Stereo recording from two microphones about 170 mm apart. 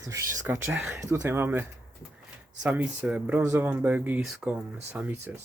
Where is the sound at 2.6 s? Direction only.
5° right (ahead or behind).